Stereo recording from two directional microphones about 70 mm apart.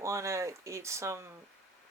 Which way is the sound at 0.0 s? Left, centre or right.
Right.